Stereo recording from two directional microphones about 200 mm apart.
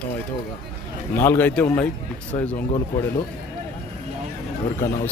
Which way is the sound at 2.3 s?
30° left (ahead or behind).